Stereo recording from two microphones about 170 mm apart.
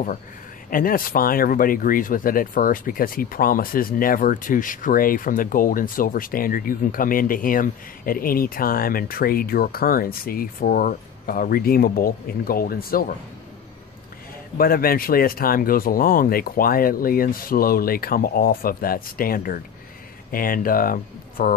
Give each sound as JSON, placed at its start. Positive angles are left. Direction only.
{"t": 0.7, "sound": "speech", "side_deg": 55}
{"t": 14.6, "sound": "speech", "side_deg": 60}